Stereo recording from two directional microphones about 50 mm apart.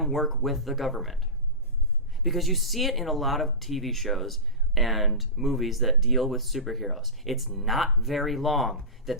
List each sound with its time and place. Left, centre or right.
0.0 s speech: centre
2.2 s speech: centre